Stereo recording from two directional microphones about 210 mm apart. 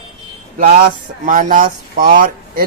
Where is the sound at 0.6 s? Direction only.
45° right (ahead or behind).